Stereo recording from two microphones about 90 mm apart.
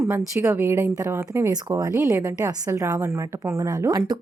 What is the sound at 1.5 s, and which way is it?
A woman's voice, 45° right (ahead or behind).